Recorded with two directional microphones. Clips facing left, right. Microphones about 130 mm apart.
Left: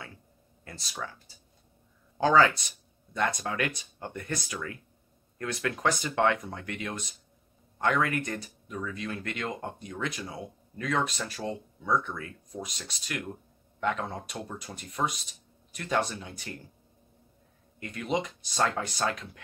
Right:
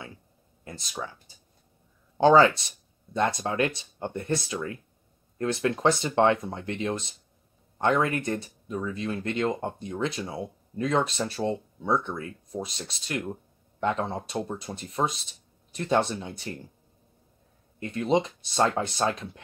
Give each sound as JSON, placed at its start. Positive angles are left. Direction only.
{"t": 0.7, "sound": "speech", "side_deg": -20}
{"t": 17.7, "sound": "speech", "side_deg": -30}